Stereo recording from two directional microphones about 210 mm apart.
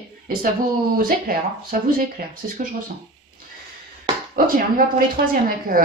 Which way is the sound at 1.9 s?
40° right (ahead or behind).